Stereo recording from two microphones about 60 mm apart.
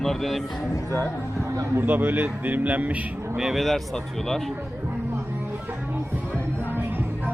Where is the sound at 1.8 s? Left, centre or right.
Right.